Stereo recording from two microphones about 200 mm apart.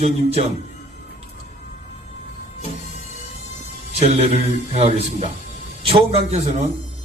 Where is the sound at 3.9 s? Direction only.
30° right (ahead or behind).